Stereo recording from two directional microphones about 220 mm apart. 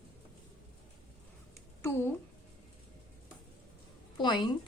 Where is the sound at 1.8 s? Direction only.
10° left (ahead or behind).